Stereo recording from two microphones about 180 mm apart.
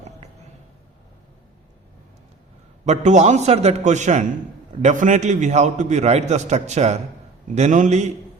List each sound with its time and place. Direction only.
2.8 s a man's voice: 40° right (ahead or behind)